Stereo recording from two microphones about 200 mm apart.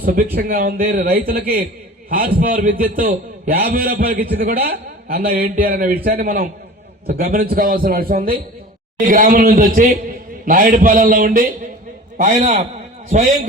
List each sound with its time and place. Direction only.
0.0 s a man's voice: 50° right (ahead or behind)